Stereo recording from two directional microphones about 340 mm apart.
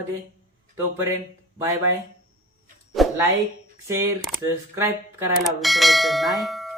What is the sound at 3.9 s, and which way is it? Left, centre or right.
Speech, centre.